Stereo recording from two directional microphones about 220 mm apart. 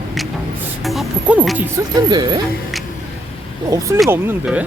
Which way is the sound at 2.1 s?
20° right (ahead or behind).